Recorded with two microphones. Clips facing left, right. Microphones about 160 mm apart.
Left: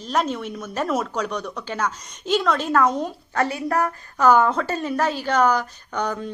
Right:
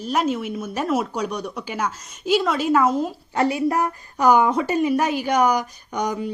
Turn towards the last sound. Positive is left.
turn(degrees=-15)  # may be behind; listen again after turning